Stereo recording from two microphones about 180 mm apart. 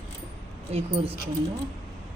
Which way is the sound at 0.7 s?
35° right (ahead or behind).